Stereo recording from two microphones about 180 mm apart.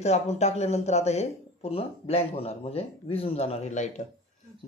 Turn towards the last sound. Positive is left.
turn(degrees=40)  # may be behind; listen again after turning